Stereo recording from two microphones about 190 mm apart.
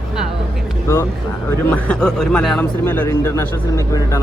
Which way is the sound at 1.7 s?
5° left (ahead or behind).